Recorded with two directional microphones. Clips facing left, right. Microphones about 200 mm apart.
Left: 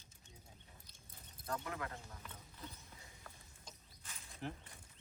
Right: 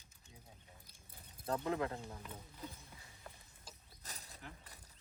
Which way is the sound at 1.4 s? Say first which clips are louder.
Right 6 dB; 30° right (ahead or behind).